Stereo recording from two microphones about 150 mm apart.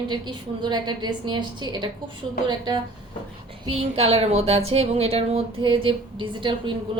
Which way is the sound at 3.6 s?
40° right (ahead or behind).